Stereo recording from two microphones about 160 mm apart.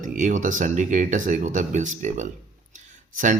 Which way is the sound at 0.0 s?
55° right (ahead or behind).